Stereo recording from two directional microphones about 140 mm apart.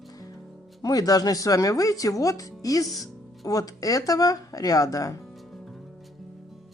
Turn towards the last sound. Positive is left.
turn(degrees=25)  # may be behind; listen again after turning